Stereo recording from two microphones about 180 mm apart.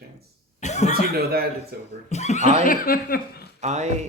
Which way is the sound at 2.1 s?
40° left (ahead or behind).